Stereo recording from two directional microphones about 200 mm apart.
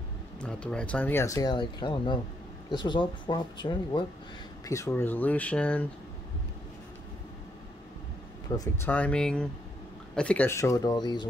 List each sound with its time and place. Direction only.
0.4 s speech: 5° left (ahead or behind)
8.5 s speech: 15° left (ahead or behind)